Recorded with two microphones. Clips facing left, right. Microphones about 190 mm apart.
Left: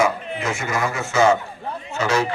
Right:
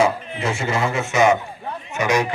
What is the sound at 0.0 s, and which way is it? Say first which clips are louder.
Speech: right 1 dB; 30° right (ahead or behind).